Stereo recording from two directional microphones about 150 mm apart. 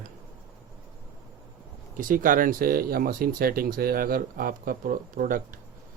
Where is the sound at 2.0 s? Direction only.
65° right (ahead or behind).